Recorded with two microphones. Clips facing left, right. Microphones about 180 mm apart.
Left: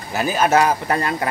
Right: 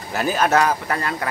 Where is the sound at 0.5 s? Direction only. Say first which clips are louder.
Left 2 dB; 20° left (ahead or behind).